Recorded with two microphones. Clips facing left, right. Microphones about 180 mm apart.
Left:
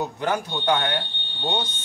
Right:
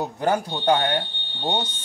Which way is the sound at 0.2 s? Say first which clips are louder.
Right 5 dB; 40° right (ahead or behind).